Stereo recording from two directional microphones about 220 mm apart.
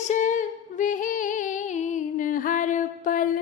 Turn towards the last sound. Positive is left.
turn(degrees=40)  # may be behind; listen again after turning